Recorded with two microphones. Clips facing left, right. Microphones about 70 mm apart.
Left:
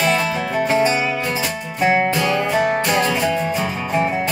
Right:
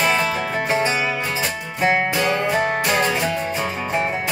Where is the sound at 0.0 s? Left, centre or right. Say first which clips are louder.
Left 1 dB; centre.